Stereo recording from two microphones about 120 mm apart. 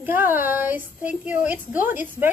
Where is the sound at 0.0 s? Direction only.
15° right (ahead or behind).